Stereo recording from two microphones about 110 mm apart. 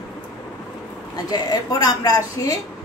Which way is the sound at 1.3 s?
35° left (ahead or behind).